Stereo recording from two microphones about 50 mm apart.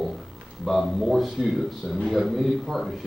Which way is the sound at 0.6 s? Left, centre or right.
Centre.